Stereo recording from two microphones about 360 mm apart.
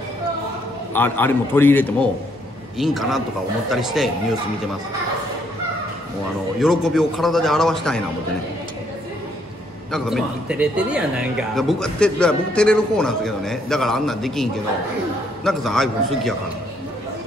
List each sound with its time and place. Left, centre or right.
0.9 s speech: centre
6.6 s speech: centre
9.8 s speech: centre